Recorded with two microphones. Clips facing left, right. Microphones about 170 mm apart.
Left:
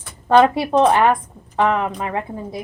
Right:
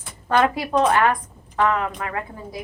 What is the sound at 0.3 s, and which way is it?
A woman's voice, 25° left (ahead or behind).